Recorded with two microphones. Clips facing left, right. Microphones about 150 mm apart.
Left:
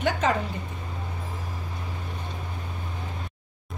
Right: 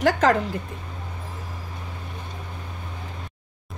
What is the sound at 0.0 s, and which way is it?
Speech, 90° right.